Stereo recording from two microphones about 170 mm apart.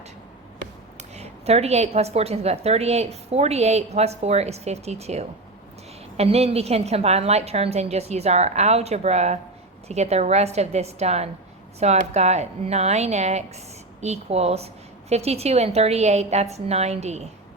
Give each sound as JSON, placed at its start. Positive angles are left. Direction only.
{"t": 0.9, "sound": "a woman's voice", "side_deg": -40}